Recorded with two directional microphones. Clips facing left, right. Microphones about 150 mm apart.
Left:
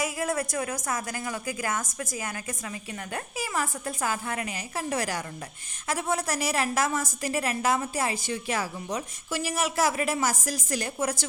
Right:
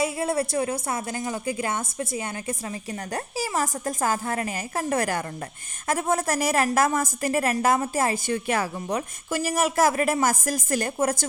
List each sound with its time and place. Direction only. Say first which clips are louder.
0.0 s a woman's voice: right 4 dB; 30° right (ahead or behind); by 11.3 s 50° right (ahead or behind)